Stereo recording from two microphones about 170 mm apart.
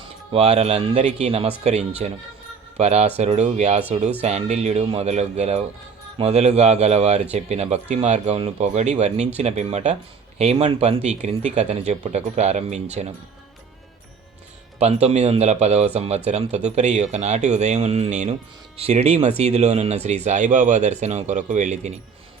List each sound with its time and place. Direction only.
0.3 s a man's voice: 35° right (ahead or behind)
14.8 s a man's voice: 40° right (ahead or behind)